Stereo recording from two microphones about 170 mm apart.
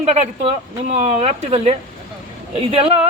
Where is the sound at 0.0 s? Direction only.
40° right (ahead or behind).